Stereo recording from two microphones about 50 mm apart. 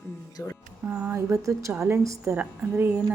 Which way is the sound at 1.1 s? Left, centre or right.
Right.